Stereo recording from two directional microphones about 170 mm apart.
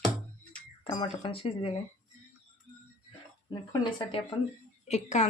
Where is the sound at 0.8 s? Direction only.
30° left (ahead or behind).